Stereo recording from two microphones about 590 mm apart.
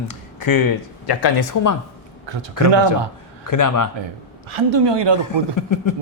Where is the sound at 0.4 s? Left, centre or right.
Left.